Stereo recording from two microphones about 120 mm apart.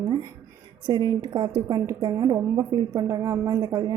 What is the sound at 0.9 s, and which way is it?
Speech, 35° right (ahead or behind).